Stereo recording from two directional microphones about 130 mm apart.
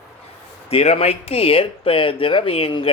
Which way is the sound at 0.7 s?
50° left (ahead or behind).